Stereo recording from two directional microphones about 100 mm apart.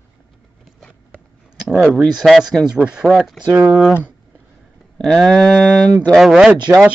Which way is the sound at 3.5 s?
20° right (ahead or behind).